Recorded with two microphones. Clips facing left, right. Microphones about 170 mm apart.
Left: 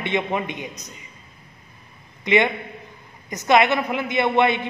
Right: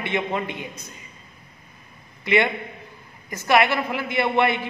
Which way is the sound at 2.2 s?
20° left (ahead or behind).